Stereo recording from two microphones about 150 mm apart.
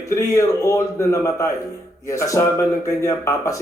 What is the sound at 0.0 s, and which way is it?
Speech, 20° left (ahead or behind).